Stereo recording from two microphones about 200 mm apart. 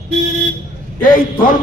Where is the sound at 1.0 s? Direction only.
40° left (ahead or behind).